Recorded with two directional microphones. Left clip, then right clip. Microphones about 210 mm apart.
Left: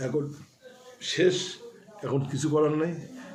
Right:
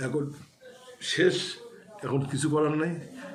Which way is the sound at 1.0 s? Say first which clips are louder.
Even; centre (ahead or behind).